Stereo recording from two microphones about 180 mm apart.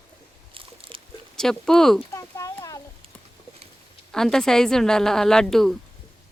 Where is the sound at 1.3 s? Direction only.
5° left (ahead or behind).